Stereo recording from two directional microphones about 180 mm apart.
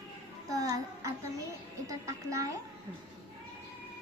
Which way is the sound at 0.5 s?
20° right (ahead or behind).